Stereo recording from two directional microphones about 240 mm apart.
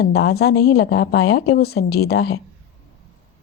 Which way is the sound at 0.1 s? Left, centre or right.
Left.